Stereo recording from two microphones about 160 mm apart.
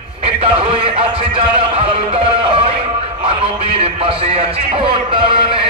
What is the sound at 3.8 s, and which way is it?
Speech, 35° right (ahead or behind).